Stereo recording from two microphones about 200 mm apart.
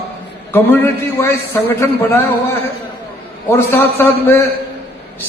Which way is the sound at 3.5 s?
10° left (ahead or behind).